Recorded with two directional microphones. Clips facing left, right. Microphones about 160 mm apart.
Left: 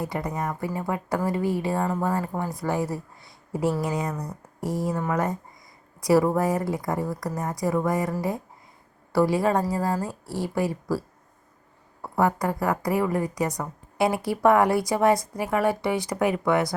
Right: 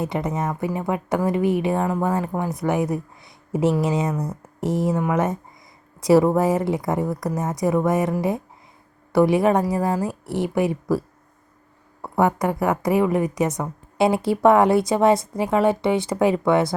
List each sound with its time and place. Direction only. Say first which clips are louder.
0.0 s a woman's voice: right 4 dB; 20° right (ahead or behind)
12.0 s a woman's voice: right 3 dB; 20° right (ahead or behind)